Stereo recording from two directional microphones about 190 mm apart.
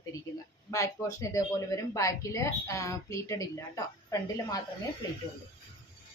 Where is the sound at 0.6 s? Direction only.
15° left (ahead or behind).